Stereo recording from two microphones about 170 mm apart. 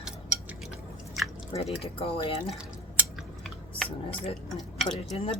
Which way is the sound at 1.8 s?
35° left (ahead or behind).